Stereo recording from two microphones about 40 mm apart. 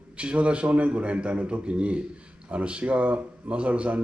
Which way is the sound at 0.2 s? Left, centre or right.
Right.